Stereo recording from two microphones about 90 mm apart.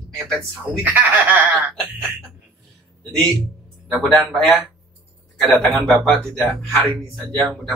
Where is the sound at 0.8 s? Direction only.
20° right (ahead or behind).